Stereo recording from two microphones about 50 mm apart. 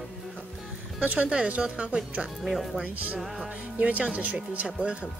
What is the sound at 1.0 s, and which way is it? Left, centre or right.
Speech, right.